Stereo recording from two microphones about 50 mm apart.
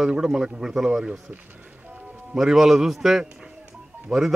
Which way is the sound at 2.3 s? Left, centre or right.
Centre.